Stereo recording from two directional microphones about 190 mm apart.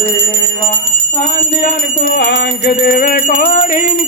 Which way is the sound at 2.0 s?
65° left (ahead or behind).